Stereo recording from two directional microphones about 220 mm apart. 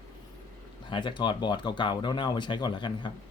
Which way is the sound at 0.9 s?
20° left (ahead or behind).